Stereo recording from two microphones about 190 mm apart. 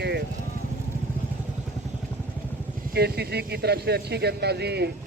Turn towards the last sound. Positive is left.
turn(degrees=-60)  # may be behind; listen again after turning